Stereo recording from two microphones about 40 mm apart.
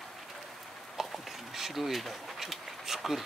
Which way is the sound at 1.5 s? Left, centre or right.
Centre.